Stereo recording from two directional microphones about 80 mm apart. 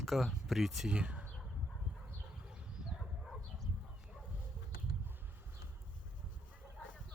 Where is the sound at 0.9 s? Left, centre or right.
Centre.